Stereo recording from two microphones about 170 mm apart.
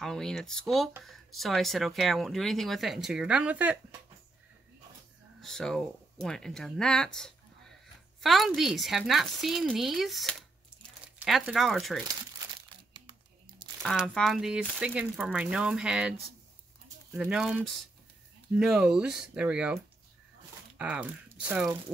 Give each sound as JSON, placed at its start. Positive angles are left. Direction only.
{"t": 0.0, "sound": "speech", "side_deg": 5}
{"t": 5.4, "sound": "speech", "side_deg": 5}
{"t": 13.8, "sound": "speech", "side_deg": 5}
{"t": 17.2, "sound": "speech", "side_deg": -5}